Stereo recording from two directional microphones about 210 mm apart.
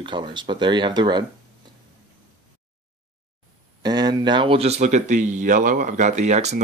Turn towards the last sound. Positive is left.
turn(degrees=-35)  # may be behind; listen again after turning